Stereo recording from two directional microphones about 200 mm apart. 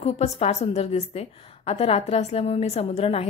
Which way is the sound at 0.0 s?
35° left (ahead or behind).